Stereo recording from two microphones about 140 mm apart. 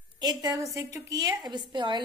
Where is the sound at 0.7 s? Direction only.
25° right (ahead or behind).